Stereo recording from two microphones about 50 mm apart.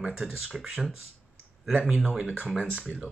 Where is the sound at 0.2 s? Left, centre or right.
Centre.